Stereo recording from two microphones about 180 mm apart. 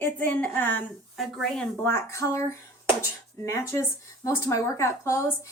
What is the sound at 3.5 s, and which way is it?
A woman's voice, 15° left (ahead or behind).